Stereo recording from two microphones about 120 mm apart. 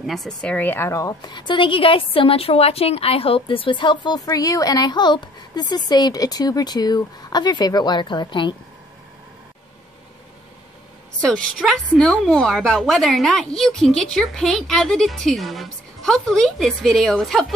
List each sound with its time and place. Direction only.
0.0 s speech: centre (ahead or behind); by 1.1 s 25° left (ahead or behind)
1.2 s a woman's voice: 40° left (ahead or behind)
11.2 s a woman's voice: 5° left (ahead or behind)